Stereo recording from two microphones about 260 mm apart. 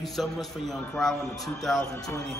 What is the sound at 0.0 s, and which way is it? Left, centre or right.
A man's voice, centre.